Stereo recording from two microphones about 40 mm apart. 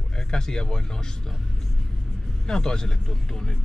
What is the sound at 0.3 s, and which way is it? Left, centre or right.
Speech, centre.